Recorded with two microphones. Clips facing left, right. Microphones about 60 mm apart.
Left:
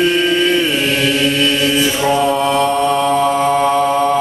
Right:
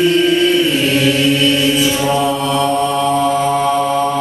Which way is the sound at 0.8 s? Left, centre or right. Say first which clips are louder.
Right 1 dB; left.